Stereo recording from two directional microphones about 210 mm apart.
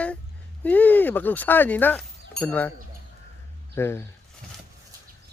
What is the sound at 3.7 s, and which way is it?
Speech, 10° left (ahead or behind).